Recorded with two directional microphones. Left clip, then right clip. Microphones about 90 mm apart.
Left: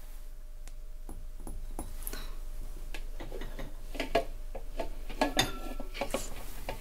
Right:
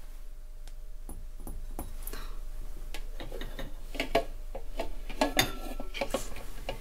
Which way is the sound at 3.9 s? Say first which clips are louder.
Right 1 dB; 25° right (ahead or behind).